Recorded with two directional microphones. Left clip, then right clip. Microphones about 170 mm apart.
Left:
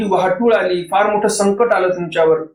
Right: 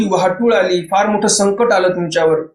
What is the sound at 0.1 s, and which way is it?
Speech, 35° right (ahead or behind).